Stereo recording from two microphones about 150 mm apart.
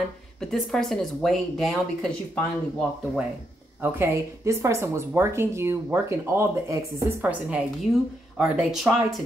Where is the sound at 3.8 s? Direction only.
15° right (ahead or behind); by 9.2 s centre (ahead or behind).